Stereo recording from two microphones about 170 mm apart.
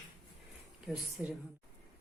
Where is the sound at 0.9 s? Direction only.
5° right (ahead or behind).